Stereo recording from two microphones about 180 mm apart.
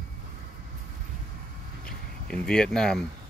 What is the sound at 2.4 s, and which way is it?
Speech, 5° left (ahead or behind).